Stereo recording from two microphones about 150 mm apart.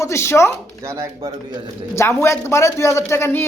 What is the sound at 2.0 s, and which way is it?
Speech, 20° left (ahead or behind).